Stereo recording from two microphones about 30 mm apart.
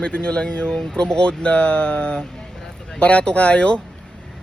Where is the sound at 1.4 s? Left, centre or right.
Left.